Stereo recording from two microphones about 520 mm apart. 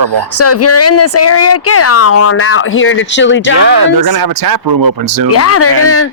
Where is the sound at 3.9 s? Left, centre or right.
Right.